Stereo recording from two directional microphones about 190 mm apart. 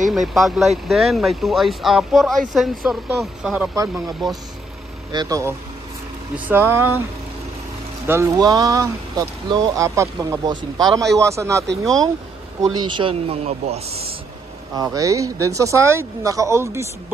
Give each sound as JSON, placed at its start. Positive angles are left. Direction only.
{"t": 0.1, "sound": "speech", "side_deg": 0}
{"t": 5.1, "sound": "speech", "side_deg": -20}
{"t": 8.1, "sound": "speech", "side_deg": -15}
{"t": 11.7, "sound": "speech", "side_deg": 0}
{"t": 12.7, "sound": "speech", "side_deg": -25}
{"t": 14.8, "sound": "speech", "side_deg": -15}